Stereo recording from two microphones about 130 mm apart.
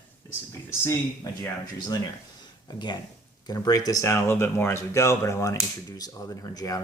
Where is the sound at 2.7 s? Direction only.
35° left (ahead or behind).